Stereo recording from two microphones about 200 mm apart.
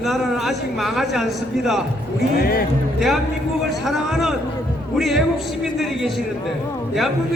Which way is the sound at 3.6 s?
Centre (ahead or behind).